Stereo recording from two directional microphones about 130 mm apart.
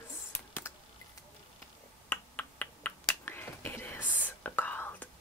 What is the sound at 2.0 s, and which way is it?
Finger snapping, 15° left (ahead or behind).